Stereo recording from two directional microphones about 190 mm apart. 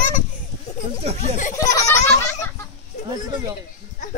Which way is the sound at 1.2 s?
40° left (ahead or behind).